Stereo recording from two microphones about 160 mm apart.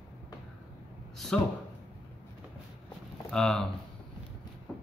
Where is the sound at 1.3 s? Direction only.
5° left (ahead or behind).